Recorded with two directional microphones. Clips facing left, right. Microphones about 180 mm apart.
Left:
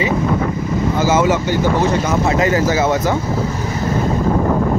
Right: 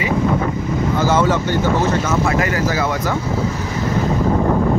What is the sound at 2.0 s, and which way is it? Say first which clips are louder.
Speech: left 2 dB; 20° left (ahead or behind).